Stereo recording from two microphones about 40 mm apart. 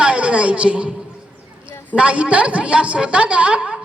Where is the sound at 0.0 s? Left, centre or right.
Right.